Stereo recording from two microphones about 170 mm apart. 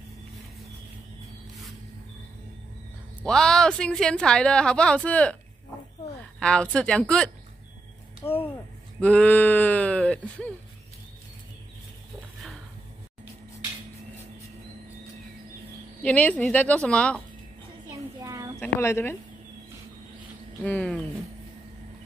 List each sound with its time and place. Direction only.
3.3 s a woman's voice: 5° left (ahead or behind)
6.4 s a woman's voice: 5° left (ahead or behind)
8.2 s speech: 20° left (ahead or behind)
9.0 s speech: 10° left (ahead or behind)
16.0 s speech: 10° left (ahead or behind)
17.8 s child singing: 20° right (ahead or behind)
18.6 s speech: 15° left (ahead or behind)
20.6 s speech: 5° left (ahead or behind)